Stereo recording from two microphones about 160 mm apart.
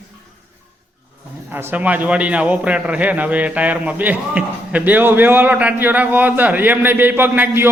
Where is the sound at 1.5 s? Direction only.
10° right (ahead or behind).